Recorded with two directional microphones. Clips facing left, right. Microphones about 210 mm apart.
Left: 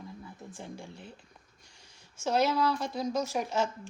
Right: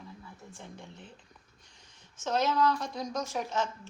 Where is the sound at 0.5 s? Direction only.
10° left (ahead or behind).